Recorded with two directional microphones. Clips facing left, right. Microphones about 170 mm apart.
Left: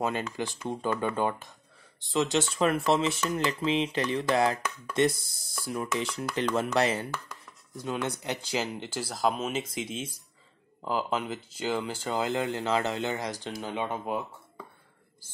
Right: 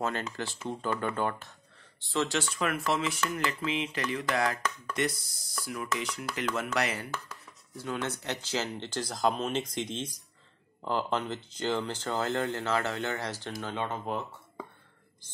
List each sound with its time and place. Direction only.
0.0 s speech: 15° left (ahead or behind)